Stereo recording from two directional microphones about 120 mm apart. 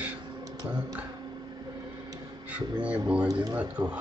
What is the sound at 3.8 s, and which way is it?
Speech, 30° right (ahead or behind).